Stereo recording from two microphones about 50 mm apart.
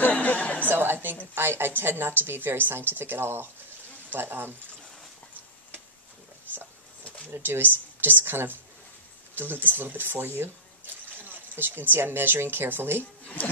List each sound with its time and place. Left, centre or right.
0.0 s a sound: left
0.7 s speech: right
7.4 s speech: right